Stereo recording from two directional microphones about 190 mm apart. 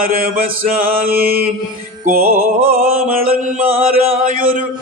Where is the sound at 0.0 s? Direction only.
50° right (ahead or behind).